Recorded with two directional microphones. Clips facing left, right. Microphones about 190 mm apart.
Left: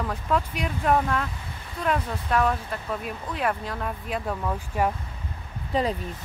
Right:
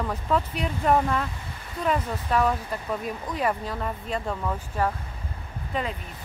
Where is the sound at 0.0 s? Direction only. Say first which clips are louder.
Even; 5° right (ahead or behind).